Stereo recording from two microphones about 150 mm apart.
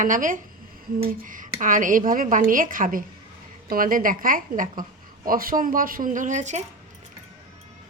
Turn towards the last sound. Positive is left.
turn(degrees=-50)  # may be behind; listen again after turning